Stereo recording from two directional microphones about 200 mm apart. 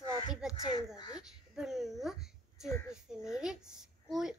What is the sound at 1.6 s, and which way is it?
Speech, centre (ahead or behind).